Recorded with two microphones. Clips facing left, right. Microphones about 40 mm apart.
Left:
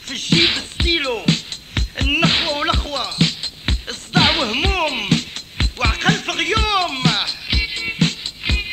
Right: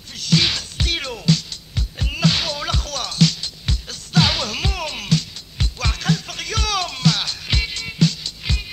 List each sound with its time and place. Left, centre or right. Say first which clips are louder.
0.1 s music: left 3 dB; left
1.7 s music: left 10 dB; left
6.5 s music: left 4 dB; left
7.2 s music: left 2 dB; centre
7.7 s music: left 5 dB; left
8.0 s music: right 3 dB; left